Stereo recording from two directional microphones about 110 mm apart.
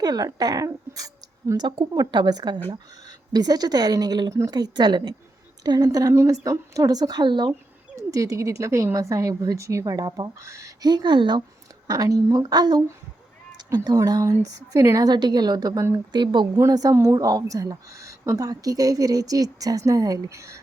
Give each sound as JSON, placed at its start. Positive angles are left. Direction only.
{"t": 0.0, "sound": "a woman's voice", "side_deg": -35}
{"t": 7.9, "sound": "speech", "side_deg": -30}
{"t": 10.8, "sound": "speech", "side_deg": -40}
{"t": 11.9, "sound": "a woman's voice", "side_deg": -35}
{"t": 16.1, "sound": "speech", "side_deg": -45}
{"t": 16.6, "sound": "a woman's voice", "side_deg": -35}